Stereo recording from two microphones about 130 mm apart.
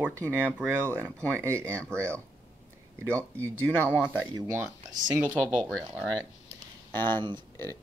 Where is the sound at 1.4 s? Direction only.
20° right (ahead or behind).